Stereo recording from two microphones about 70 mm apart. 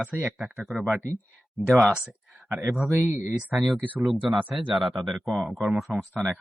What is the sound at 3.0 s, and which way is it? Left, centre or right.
Speech, right.